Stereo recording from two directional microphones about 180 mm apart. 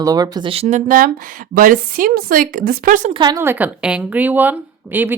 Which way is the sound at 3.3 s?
10° right (ahead or behind).